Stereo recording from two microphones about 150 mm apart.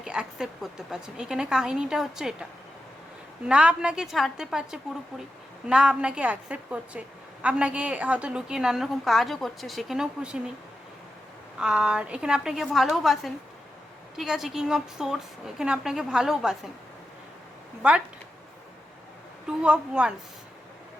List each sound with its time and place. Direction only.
0.0 s a woman's voice: 5° right (ahead or behind)
11.6 s a woman's voice: 5° right (ahead or behind)
17.8 s a woman's voice: 10° right (ahead or behind)
19.5 s a woman's voice: 5° right (ahead or behind)